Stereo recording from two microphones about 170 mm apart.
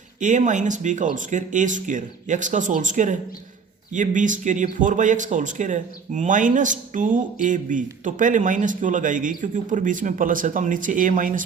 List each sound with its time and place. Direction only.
0.2 s speech: 45° right (ahead or behind)